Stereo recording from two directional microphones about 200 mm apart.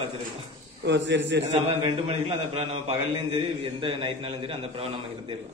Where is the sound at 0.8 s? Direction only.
60° right (ahead or behind).